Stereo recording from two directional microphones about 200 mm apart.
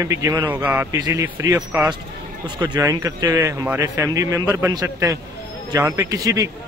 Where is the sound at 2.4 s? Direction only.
20° right (ahead or behind).